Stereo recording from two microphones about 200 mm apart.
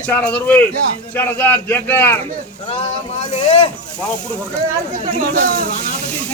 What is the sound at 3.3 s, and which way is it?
Speech, 35° left (ahead or behind).